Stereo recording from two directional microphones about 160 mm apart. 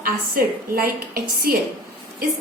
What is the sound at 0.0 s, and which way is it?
A woman's voice, 65° right (ahead or behind).